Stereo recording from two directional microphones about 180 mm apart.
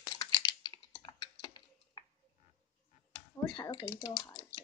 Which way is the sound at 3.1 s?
25° left (ahead or behind).